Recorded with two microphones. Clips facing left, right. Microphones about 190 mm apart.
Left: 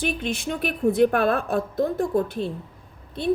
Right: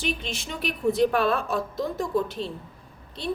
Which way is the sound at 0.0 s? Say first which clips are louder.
Left 5 dB; 55° left (ahead or behind).